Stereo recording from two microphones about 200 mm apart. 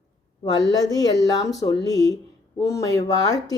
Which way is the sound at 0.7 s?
20° left (ahead or behind).